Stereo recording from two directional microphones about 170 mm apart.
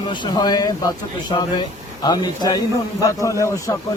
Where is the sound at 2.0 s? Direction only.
25° left (ahead or behind).